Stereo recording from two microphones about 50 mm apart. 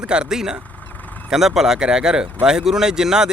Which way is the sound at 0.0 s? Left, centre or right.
Centre.